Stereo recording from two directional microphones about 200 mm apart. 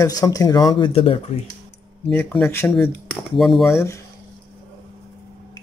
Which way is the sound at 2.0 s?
5° left (ahead or behind).